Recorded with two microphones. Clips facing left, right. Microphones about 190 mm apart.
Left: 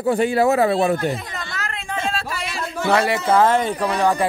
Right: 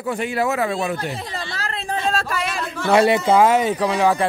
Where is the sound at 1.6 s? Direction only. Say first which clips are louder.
Right 1 dB; 35° right (ahead or behind).